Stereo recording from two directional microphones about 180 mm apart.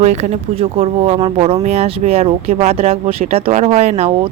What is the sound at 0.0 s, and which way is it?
Speech, 40° right (ahead or behind).